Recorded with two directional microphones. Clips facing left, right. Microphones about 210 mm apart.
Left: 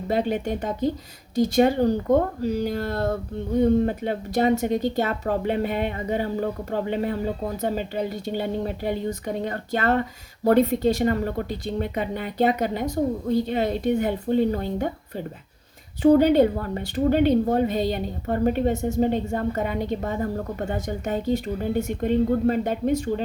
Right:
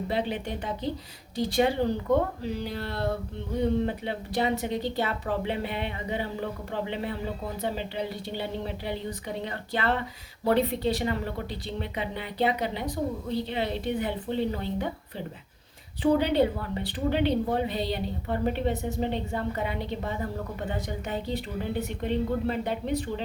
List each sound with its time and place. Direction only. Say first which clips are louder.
0.1 s a woman's voice: left 8 dB; 45° left (ahead or behind)